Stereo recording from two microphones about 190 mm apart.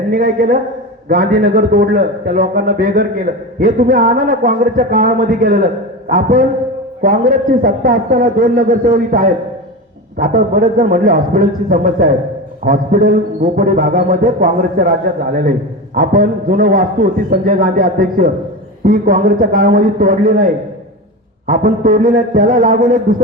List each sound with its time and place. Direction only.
0.1 s a man's voice: 50° right (ahead or behind)